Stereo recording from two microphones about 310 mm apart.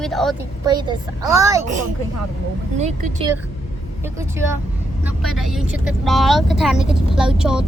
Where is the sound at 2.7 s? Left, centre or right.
Right.